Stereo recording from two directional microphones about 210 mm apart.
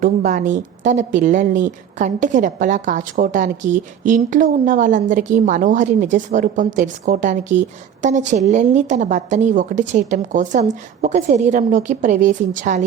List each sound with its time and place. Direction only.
0.0 s a woman's voice: 40° right (ahead or behind)